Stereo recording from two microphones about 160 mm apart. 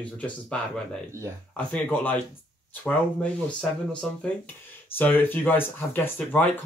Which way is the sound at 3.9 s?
5° left (ahead or behind).